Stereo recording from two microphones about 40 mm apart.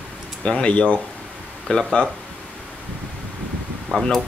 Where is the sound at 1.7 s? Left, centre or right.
Left.